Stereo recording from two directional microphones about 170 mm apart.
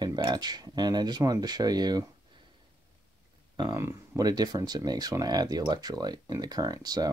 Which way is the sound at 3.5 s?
20° right (ahead or behind).